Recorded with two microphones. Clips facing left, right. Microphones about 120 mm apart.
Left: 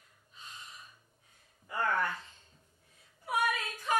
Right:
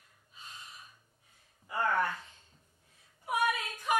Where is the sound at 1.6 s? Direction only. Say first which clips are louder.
Right 1 dB; 15° right (ahead or behind).